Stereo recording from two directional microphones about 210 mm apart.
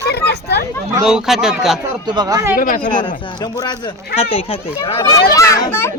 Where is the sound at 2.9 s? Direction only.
20° left (ahead or behind).